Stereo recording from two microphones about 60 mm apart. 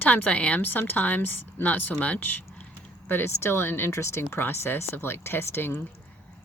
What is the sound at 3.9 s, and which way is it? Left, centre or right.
Speech, left.